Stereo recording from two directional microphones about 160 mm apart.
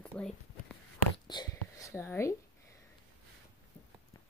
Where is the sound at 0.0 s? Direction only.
5° left (ahead or behind).